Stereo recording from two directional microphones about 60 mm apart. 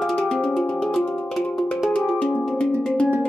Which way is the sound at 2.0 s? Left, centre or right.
Centre.